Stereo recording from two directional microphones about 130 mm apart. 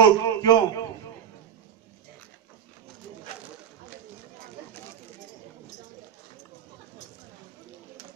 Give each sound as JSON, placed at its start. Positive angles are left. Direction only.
{"t": 0.0, "sound": "a man's voice", "side_deg": 25}